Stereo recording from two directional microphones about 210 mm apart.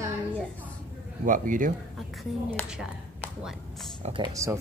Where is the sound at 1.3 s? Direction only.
40° right (ahead or behind).